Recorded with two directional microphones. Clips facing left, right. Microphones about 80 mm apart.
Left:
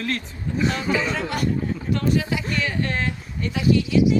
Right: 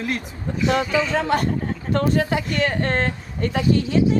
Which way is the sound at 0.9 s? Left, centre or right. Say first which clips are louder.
Right 1 dB; left.